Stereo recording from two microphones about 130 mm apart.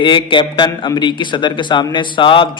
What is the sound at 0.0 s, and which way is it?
A man's voice, 40° left (ahead or behind).